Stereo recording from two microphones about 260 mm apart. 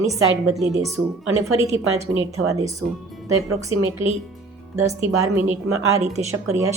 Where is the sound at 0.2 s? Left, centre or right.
Right.